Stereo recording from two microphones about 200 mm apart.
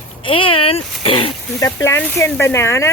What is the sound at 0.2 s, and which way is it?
Speech, 25° left (ahead or behind).